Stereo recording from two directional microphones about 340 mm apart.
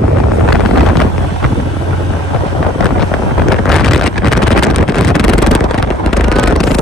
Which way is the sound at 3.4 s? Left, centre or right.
Centre.